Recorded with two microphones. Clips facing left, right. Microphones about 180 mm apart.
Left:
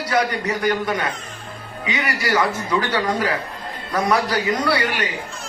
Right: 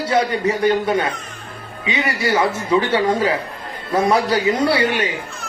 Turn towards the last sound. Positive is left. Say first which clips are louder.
# right 4 dB
turn(degrees=-25)  # may be behind; listen again after turning